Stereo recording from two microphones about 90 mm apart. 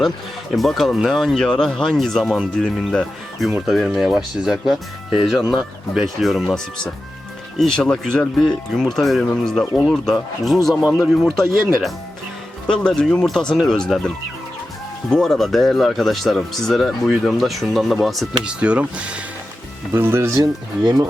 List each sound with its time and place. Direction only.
0.5 s speech: centre (ahead or behind)
15.1 s speech: 5° left (ahead or behind)
18.4 s speech: 10° right (ahead or behind)
19.9 s speech: 25° right (ahead or behind)